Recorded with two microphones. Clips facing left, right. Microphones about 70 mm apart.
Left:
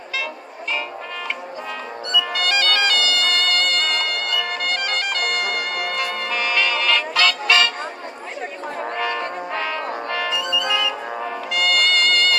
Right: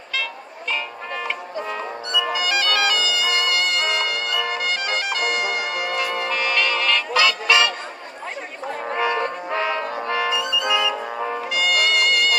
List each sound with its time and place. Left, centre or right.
2.3 s bagpipes: centre
7.2 s music: centre
8.8 s brass instrument: centre
11.1 s music: centre